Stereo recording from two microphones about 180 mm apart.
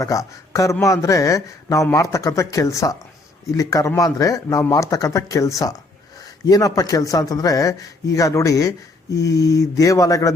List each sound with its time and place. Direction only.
0.0 s speech: 20° left (ahead or behind)